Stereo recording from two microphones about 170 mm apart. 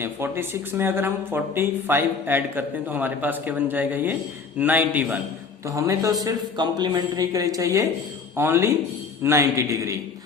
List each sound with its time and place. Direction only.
0.0 s a man's voice: 15° right (ahead or behind)